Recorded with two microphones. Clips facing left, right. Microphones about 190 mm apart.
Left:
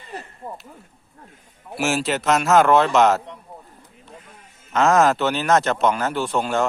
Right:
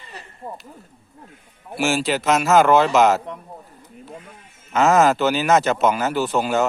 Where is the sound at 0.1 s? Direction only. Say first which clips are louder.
Left 6 dB; 50° left (ahead or behind).